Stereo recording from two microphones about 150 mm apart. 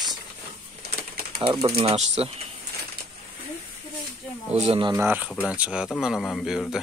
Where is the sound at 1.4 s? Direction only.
35° right (ahead or behind).